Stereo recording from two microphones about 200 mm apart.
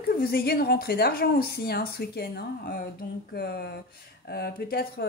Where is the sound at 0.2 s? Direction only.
50° left (ahead or behind).